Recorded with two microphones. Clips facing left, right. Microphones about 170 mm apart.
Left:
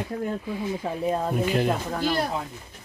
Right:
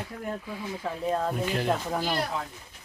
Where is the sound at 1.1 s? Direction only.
10° left (ahead or behind).